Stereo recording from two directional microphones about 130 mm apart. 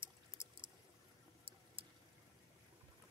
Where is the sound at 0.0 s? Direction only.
40° right (ahead or behind).